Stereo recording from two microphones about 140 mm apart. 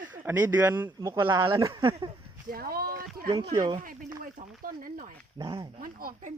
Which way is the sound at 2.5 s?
90° right.